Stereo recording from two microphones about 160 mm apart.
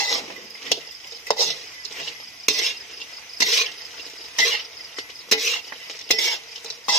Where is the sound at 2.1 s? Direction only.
Centre (ahead or behind).